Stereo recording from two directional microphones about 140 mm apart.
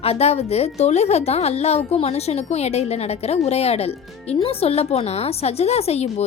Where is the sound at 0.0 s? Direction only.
45° left (ahead or behind).